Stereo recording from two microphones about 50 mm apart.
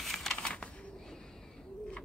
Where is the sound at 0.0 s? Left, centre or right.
Centre.